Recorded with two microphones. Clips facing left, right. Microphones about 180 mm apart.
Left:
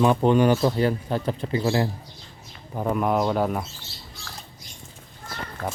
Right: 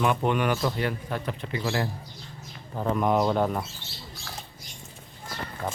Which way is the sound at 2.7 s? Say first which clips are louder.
Left 1 dB; 10° left (ahead or behind).